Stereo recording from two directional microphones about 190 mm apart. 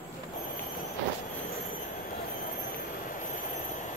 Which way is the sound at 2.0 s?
50° left (ahead or behind).